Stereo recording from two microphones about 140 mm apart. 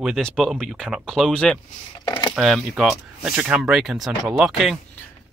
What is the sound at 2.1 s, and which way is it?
Speech, 30° left (ahead or behind).